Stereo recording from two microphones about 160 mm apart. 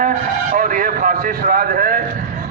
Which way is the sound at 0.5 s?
60° right (ahead or behind).